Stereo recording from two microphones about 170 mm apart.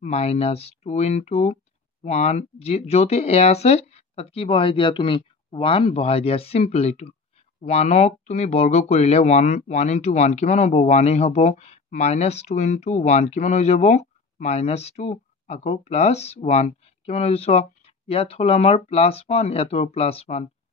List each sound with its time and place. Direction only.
0.0 s speech: 40° left (ahead or behind)